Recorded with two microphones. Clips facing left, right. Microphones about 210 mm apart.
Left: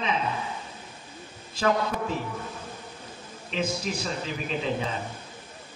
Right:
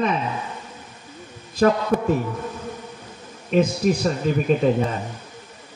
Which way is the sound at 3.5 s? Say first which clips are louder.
Right 11 dB; 55° right (ahead or behind).